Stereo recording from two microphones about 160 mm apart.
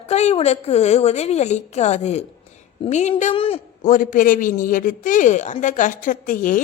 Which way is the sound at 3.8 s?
55° left (ahead or behind).